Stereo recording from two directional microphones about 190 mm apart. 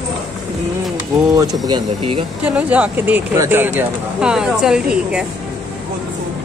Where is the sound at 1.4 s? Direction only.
20° right (ahead or behind).